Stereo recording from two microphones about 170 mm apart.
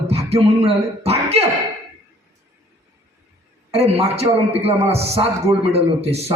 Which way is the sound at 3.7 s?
35° right (ahead or behind).